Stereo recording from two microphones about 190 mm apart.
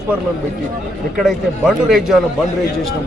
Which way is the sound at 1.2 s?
Centre (ahead or behind).